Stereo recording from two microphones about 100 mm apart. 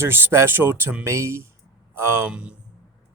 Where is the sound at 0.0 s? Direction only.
25° right (ahead or behind).